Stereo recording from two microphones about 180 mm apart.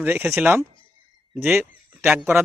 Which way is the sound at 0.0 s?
10° right (ahead or behind).